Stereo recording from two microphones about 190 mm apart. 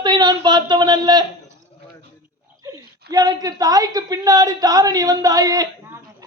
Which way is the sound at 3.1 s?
20° right (ahead or behind).